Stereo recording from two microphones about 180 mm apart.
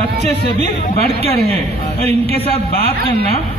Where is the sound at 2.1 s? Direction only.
35° right (ahead or behind).